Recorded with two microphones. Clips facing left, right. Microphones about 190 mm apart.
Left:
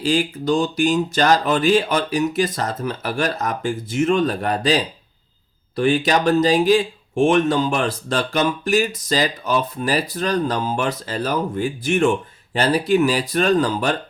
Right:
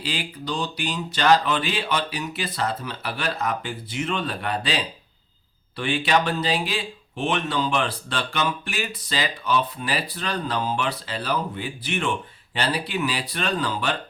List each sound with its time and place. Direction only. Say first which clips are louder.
0.0 s speech: left 11 dB; 45° left (ahead or behind)